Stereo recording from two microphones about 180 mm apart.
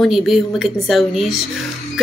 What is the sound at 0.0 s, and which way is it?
Speech, centre (ahead or behind).